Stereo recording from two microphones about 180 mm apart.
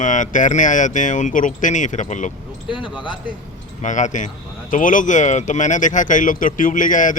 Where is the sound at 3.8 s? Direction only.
45° left (ahead or behind).